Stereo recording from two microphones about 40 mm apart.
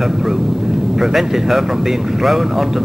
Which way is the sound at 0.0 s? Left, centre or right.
Centre.